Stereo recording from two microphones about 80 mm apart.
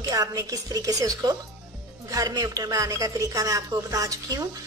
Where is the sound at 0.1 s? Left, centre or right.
Right.